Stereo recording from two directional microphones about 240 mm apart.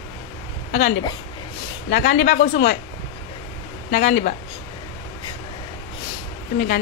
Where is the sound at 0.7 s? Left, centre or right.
Left.